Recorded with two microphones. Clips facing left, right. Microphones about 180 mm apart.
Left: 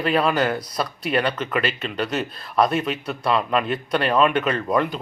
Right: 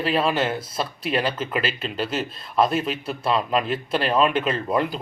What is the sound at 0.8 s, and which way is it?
Speech, 30° right (ahead or behind).